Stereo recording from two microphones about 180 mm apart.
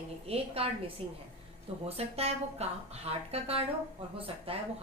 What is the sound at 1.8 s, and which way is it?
Speech, 35° right (ahead or behind).